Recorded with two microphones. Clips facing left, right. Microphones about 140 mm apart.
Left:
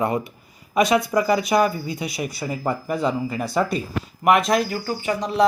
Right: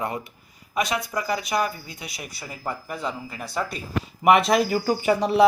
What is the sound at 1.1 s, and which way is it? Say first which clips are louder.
Speech: left 8 dB; 45° left (ahead or behind).